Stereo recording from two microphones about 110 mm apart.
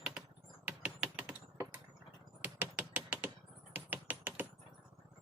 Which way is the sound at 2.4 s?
15° right (ahead or behind).